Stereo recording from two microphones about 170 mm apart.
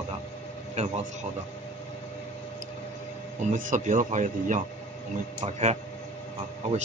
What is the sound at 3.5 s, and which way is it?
Speech, 50° right (ahead or behind).